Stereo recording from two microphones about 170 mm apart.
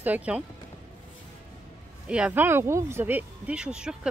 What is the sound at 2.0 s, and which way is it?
Speech, 5° right (ahead or behind).